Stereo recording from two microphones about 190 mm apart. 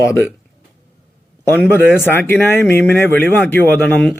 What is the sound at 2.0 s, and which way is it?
Speech, 10° left (ahead or behind).